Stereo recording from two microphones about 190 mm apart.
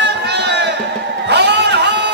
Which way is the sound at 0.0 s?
65° right (ahead or behind).